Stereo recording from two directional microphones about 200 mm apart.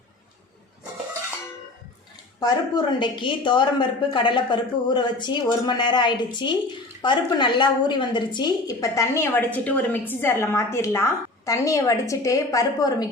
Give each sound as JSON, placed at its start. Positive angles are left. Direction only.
{"t": 2.4, "sound": "a woman's voice", "side_deg": 20}